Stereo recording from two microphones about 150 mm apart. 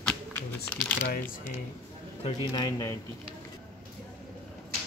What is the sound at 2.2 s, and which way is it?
Speech, 30° left (ahead or behind).